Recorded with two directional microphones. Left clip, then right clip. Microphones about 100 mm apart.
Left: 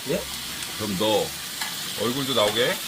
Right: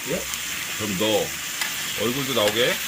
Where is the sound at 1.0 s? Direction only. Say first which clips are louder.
Even; 10° right (ahead or behind).